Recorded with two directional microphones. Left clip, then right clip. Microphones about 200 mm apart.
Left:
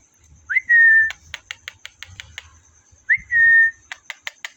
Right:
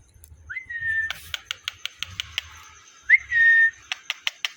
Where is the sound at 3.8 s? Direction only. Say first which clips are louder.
Right 4 dB; 25° left (ahead or behind).